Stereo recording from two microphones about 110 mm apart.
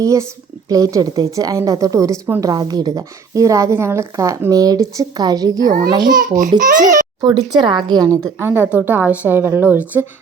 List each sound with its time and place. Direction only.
0.0 s a woman's voice: 30° right (ahead or behind)
8.4 s a woman's voice: 20° right (ahead or behind)